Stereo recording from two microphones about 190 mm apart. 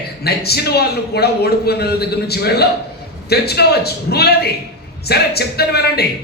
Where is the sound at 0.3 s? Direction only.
55° left (ahead or behind).